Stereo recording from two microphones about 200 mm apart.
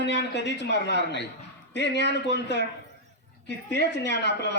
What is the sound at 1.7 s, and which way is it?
Speech, 60° left (ahead or behind).